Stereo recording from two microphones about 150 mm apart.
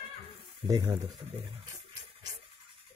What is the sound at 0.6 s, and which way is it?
Speech, 25° right (ahead or behind).